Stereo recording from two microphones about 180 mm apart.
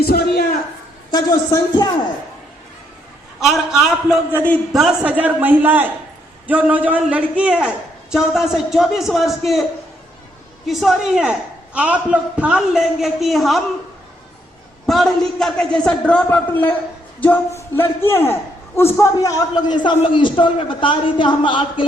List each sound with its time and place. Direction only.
0.0 s a woman's voice: 60° left (ahead or behind)
1.1 s a man's voice: 20° left (ahead or behind)
3.4 s a man's voice: centre (ahead or behind)
4.3 s a man's voice: 10° left (ahead or behind)
10.7 s a man's voice: centre (ahead or behind)
14.8 s a man's voice: centre (ahead or behind); by 21.8 s 25° left (ahead or behind)